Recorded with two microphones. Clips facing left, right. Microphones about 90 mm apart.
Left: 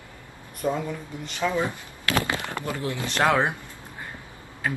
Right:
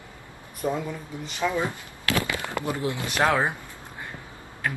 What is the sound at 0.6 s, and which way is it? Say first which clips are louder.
Speech: left 1 dB; 10° right (ahead or behind).